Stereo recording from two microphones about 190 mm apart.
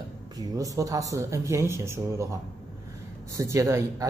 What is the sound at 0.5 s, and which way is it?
Speech, 20° right (ahead or behind).